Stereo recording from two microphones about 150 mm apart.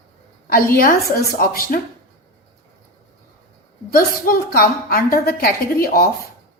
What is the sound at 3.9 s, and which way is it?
A woman's voice, 75° left (ahead or behind).